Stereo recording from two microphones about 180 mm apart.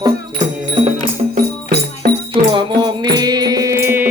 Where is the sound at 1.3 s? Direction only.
55° right (ahead or behind).